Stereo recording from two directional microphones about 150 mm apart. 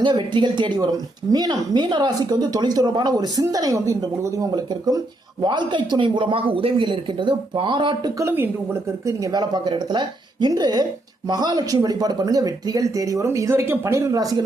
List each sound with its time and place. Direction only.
0.0 s speech: 30° right (ahead or behind)
8.2 s speech: 15° right (ahead or behind)